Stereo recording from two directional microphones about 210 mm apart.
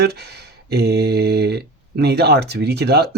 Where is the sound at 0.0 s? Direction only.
50° right (ahead or behind).